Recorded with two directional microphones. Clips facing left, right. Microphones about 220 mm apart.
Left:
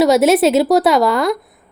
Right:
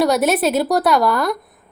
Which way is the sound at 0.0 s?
25° left (ahead or behind).